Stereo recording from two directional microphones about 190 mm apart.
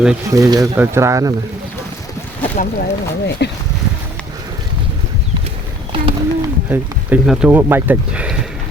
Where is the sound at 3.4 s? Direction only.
60° left (ahead or behind).